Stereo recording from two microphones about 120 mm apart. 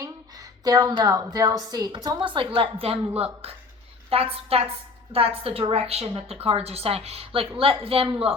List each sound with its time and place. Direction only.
0.6 s a woman's voice: 35° right (ahead or behind); by 3.0 s 50° right (ahead or behind)
4.1 s a woman's voice: 55° right (ahead or behind)